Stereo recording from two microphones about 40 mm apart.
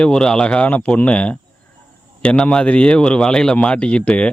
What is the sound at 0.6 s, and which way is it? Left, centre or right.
A man's voice, left.